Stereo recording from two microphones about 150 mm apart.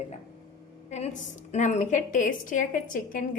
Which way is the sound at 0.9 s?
50° left (ahead or behind).